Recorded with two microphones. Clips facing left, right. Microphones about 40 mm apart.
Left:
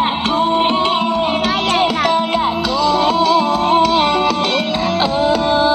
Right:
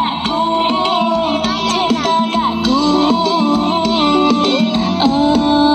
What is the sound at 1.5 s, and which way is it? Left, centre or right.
Music, left.